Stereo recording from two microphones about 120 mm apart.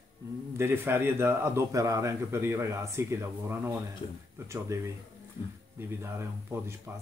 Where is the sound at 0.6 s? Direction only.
20° right (ahead or behind).